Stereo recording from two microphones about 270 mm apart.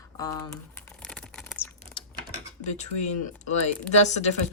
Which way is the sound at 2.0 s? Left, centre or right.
Centre.